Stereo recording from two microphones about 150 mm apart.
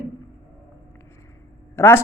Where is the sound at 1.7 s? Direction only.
15° left (ahead or behind).